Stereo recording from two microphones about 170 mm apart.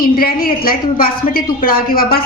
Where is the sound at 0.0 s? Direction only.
60° left (ahead or behind).